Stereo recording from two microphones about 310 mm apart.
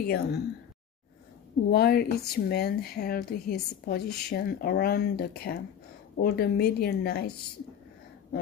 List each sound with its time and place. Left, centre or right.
0.0 s speech: left
1.7 s a woman's voice: left